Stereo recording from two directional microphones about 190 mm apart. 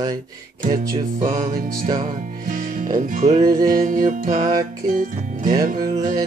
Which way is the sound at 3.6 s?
45° right (ahead or behind).